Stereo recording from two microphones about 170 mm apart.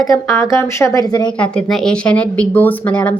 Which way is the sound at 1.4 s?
5° left (ahead or behind).